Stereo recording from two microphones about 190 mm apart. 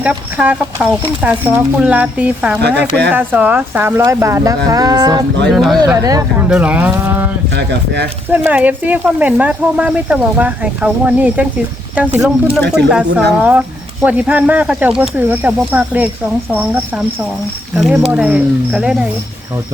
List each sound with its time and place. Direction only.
0.0 s speech: 5° right (ahead or behind)
2.6 s speech: 60° right (ahead or behind)
3.2 s speech: 10° right (ahead or behind)
5.5 s speech: centre (ahead or behind)
5.8 s speech: 20° right (ahead or behind)
6.5 s speech: 5° right (ahead or behind)
7.5 s speech: 65° right (ahead or behind)
8.3 s speech: 10° right (ahead or behind)